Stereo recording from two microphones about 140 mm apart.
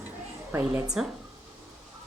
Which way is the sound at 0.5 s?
15° right (ahead or behind).